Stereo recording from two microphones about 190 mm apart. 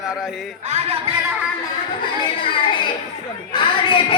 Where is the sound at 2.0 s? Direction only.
25° left (ahead or behind).